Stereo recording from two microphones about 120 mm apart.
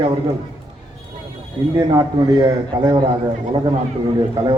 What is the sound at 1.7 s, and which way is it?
A man's voice, 35° right (ahead or behind).